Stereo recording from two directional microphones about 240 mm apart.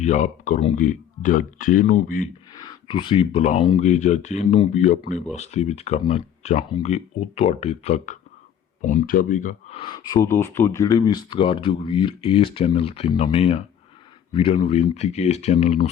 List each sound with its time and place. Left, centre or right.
0.0 s speech: left
2.5 s speech: centre